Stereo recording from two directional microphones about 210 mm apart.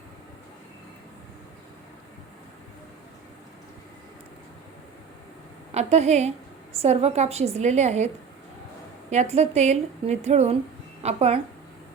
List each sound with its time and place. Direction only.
5.7 s a woman's voice: 30° right (ahead or behind)